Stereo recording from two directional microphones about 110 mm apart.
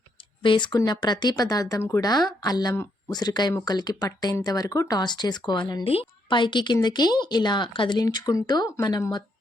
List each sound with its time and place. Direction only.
0.4 s a woman's voice: 45° left (ahead or behind)
5.8 s a woman's voice: 60° left (ahead or behind)
8.0 s a woman's voice: 35° left (ahead or behind)